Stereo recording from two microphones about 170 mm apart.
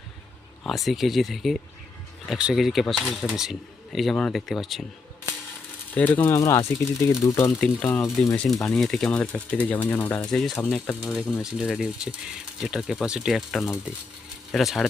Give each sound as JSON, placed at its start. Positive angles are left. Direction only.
{"t": 0.6, "sound": "speech", "side_deg": 0}
{"t": 5.9, "sound": "speech", "side_deg": 10}
{"t": 8.7, "sound": "speech", "side_deg": 0}
{"t": 11.1, "sound": "speech", "side_deg": -5}